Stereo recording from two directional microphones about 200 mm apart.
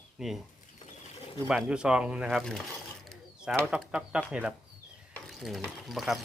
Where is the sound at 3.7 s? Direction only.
5° right (ahead or behind).